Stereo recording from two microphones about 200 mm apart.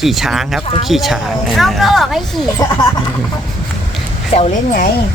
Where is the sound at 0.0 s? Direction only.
Centre (ahead or behind).